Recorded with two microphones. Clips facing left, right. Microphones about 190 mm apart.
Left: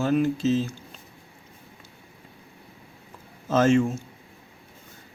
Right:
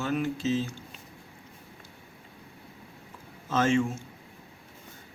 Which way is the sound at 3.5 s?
40° left (ahead or behind).